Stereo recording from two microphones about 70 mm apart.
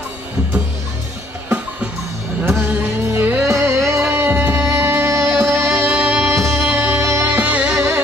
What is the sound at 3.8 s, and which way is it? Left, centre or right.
Music, centre.